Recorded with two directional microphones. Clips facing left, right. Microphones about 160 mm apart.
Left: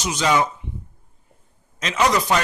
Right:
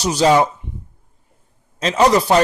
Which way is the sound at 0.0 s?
35° right (ahead or behind).